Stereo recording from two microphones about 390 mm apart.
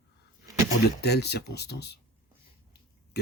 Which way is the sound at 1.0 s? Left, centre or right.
Left.